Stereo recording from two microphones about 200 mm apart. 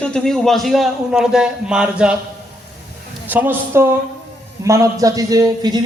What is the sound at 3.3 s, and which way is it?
A man's voice, 10° right (ahead or behind).